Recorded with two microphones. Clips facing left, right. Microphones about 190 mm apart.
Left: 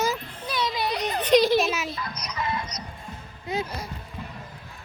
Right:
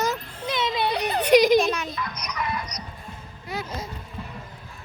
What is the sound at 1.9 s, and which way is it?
Music, 30° left (ahead or behind).